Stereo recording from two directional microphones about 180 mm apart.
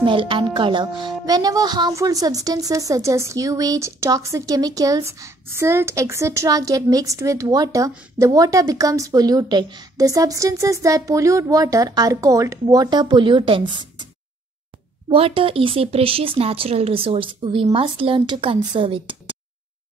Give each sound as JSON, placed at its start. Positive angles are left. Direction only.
{"t": 0.0, "sound": "a woman's voice", "side_deg": -30}
{"t": 15.0, "sound": "a woman's voice", "side_deg": -30}